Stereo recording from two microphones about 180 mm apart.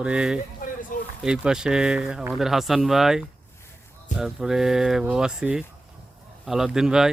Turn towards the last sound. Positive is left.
turn(degrees=-5)  # may be behind; listen again after turning